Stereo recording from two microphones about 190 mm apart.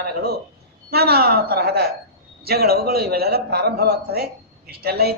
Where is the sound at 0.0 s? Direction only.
55° right (ahead or behind).